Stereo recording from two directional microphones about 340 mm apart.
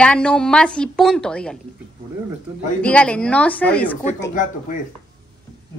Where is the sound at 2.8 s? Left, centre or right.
Centre.